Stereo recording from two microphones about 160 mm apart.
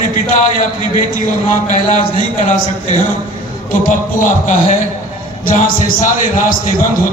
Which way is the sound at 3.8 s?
55° left (ahead or behind).